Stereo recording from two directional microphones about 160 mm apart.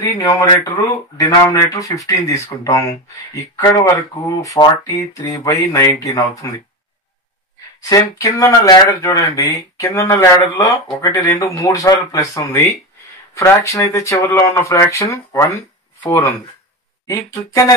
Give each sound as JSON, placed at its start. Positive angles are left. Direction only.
{"t": 0.0, "sound": "speech", "side_deg": 20}
{"t": 4.4, "sound": "speech", "side_deg": 25}
{"t": 7.9, "sound": "speech", "side_deg": 20}
{"t": 15.5, "sound": "a sound", "side_deg": 20}
{"t": 17.1, "sound": "speech", "side_deg": 20}